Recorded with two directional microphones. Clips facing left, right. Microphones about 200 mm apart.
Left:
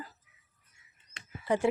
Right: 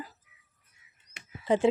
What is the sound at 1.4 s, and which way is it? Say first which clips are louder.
Speech: right 4 dB; 20° right (ahead or behind).